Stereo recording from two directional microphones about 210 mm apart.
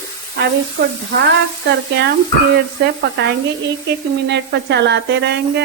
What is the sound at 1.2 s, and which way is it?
Sizzle, 55° right (ahead or behind).